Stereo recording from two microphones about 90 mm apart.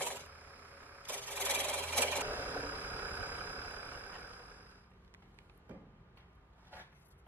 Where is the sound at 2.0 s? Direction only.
20° right (ahead or behind).